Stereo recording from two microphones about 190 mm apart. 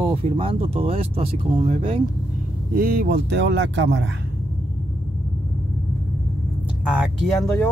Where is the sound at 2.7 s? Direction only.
50° right (ahead or behind); by 3.9 s 70° right (ahead or behind).